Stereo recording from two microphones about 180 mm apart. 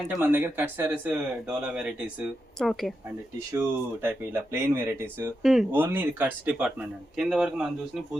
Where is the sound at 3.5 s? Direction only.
10° right (ahead or behind).